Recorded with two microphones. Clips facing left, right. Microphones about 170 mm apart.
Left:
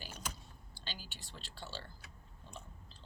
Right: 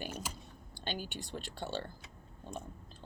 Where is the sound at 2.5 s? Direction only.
50° right (ahead or behind).